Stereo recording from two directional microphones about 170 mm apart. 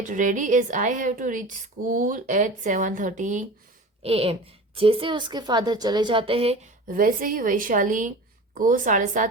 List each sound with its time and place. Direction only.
0.0 s a woman's voice: 45° right (ahead or behind)
4.0 s a woman's voice: 35° right (ahead or behind)
6.8 s a woman's voice: 55° right (ahead or behind)